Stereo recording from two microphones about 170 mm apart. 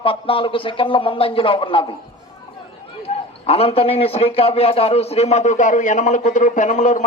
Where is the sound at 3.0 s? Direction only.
35° left (ahead or behind).